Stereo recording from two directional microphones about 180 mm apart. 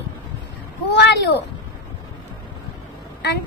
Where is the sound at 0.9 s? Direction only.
70° left (ahead or behind).